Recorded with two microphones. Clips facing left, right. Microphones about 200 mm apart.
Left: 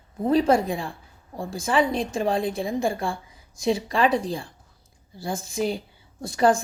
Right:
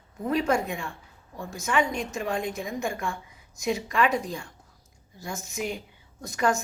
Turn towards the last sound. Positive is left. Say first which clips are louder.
# left 6 dB
turn(degrees=30)  # may be behind; listen again after turning